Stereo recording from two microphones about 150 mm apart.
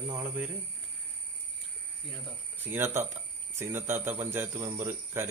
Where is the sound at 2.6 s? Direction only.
15° right (ahead or behind).